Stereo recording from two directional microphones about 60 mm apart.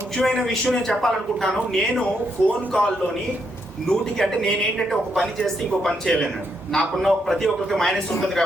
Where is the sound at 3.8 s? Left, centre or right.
Centre.